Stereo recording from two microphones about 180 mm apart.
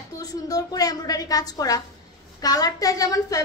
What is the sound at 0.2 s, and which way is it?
A woman's voice, 20° left (ahead or behind).